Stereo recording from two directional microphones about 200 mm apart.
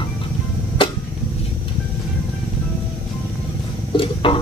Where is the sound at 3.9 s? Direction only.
25° left (ahead or behind).